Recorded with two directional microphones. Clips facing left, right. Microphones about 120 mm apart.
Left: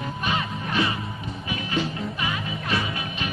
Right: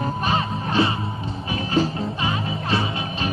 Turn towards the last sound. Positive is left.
turn(degrees=-30)  # may be behind; listen again after turning